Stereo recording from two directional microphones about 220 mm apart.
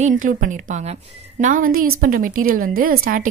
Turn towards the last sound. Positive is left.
turn(degrees=-40)  # may be behind; listen again after turning